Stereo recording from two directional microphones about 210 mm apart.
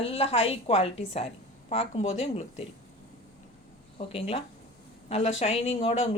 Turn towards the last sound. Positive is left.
turn(degrees=30)  # may be behind; listen again after turning